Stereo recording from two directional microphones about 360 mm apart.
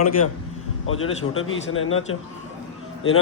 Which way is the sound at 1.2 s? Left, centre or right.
Left.